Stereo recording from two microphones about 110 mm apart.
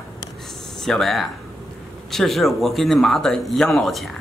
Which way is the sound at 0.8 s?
Centre (ahead or behind).